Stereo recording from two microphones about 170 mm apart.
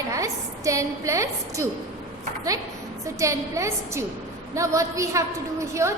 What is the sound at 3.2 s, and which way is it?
A woman's voice, 20° right (ahead or behind).